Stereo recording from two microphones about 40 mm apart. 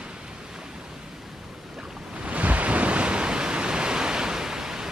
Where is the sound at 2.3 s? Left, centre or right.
Right.